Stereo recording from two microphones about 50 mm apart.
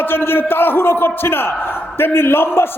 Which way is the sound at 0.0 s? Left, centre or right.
Left.